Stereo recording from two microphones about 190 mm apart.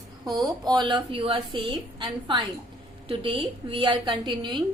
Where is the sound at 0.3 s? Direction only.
20° right (ahead or behind).